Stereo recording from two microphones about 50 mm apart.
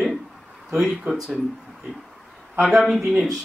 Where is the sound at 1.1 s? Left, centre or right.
Right.